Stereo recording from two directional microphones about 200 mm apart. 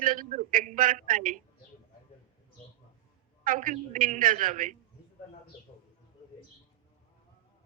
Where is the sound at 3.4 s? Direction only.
40° right (ahead or behind).